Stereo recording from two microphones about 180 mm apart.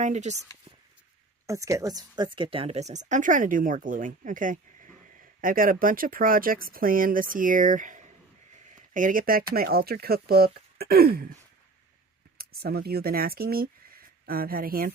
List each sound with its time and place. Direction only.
0.0 s speech: 40° right (ahead or behind)
1.5 s speech: 20° right (ahead or behind); by 11.3 s 60° right (ahead or behind)
12.4 s speech: 60° right (ahead or behind)